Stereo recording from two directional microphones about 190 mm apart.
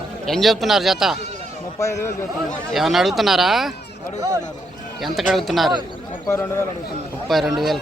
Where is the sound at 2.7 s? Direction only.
Centre (ahead or behind).